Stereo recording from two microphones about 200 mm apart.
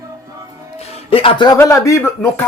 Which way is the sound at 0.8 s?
30° left (ahead or behind).